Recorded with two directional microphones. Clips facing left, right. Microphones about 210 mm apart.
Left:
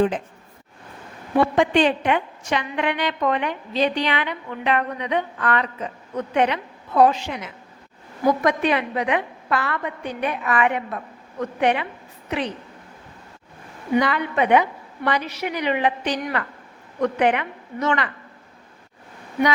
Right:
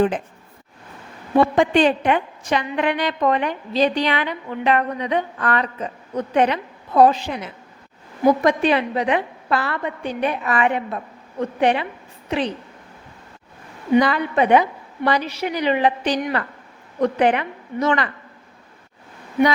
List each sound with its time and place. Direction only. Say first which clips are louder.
1.5 s a woman's voice: right 2 dB; 40° right (ahead or behind)
14.0 s a woman's voice: right 3 dB; 35° right (ahead or behind)